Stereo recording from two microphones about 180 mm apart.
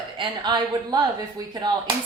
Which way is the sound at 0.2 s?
25° right (ahead or behind).